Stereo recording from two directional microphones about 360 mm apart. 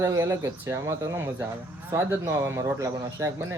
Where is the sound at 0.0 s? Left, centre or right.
Centre.